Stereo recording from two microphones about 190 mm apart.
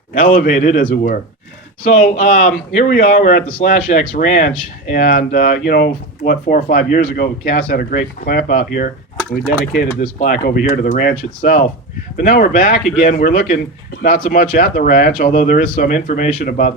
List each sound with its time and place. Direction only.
0.1 s speech: 45° left (ahead or behind)